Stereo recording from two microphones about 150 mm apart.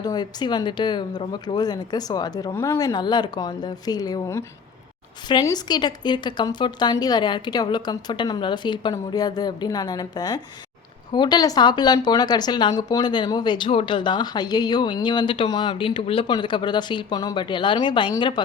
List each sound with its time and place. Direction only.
0.0 s a woman's voice: 25° left (ahead or behind)